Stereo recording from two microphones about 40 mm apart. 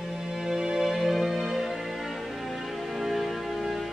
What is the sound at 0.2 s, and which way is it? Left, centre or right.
Music, centre.